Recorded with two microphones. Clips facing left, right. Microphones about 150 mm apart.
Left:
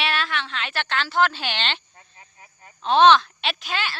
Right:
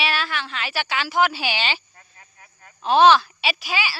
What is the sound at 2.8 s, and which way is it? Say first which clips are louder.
Speech: right 1 dB; 5° right (ahead or behind).